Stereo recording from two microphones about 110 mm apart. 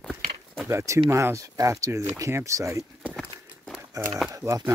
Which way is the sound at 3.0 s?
5° right (ahead or behind).